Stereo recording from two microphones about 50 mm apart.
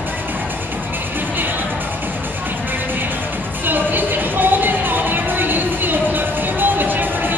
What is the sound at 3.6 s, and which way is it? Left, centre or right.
Music, right.